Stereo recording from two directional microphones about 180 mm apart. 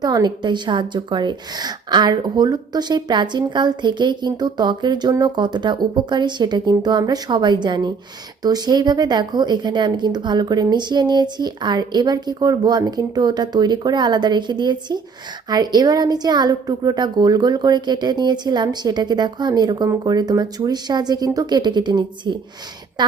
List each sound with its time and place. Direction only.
0.0 s a woman's voice: 20° right (ahead or behind)